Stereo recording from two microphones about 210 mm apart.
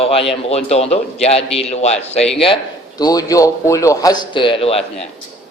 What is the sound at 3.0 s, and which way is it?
A man's voice, 15° left (ahead or behind).